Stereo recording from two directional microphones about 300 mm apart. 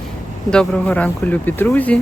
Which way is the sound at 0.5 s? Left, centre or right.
Centre.